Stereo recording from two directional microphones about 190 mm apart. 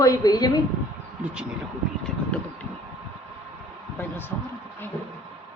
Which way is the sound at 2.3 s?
5° left (ahead or behind).